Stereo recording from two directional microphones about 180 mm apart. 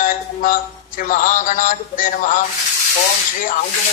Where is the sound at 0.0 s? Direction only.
50° left (ahead or behind).